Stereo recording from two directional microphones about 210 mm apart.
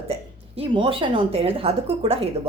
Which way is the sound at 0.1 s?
25° right (ahead or behind).